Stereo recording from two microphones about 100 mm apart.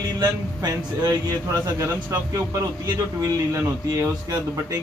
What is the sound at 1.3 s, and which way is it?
Speech, 30° right (ahead or behind).